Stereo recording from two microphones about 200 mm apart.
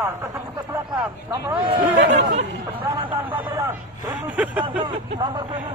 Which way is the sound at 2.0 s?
60° right (ahead or behind).